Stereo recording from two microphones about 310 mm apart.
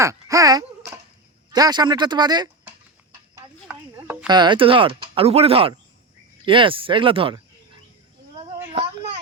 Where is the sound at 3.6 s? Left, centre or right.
Centre.